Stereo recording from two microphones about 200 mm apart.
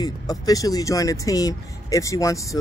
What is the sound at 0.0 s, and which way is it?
Speech, 20° left (ahead or behind).